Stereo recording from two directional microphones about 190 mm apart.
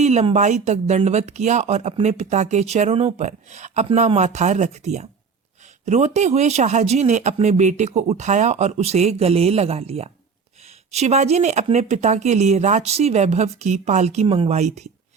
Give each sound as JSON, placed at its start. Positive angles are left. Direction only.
{"t": 0.0, "sound": "speech", "side_deg": -35}